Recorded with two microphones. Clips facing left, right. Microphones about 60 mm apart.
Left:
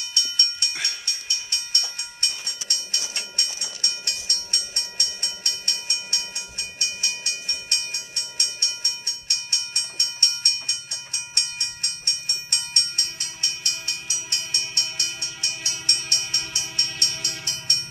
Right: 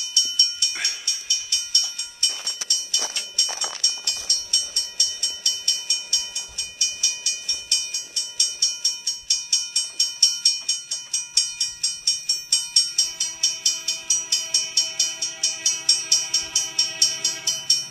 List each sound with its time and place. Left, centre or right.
0.0 s music: left
1.0 s train: left
2.9 s insect: left
3.4 s music: right
3.8 s train: left